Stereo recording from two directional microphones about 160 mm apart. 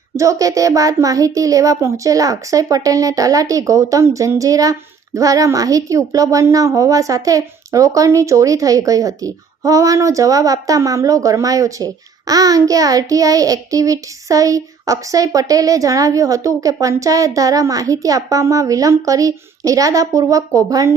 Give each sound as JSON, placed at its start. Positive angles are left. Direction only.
{"t": 0.2, "sound": "a child's voice", "side_deg": -20}